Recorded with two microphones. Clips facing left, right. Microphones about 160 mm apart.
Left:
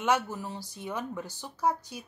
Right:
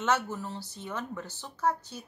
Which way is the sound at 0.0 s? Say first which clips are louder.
Left 1 dB; 10° left (ahead or behind).